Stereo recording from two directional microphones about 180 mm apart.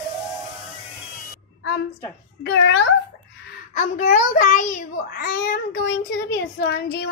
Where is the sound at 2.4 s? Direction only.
85° left.